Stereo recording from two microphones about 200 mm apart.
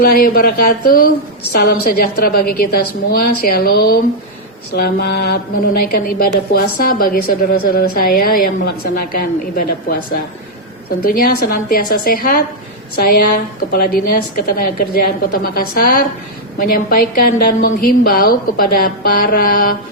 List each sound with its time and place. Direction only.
0.0 s a woman's voice: 50° left (ahead or behind)
4.7 s mantra: 55° left (ahead or behind)
5.8 s a woman's voice: 50° left (ahead or behind)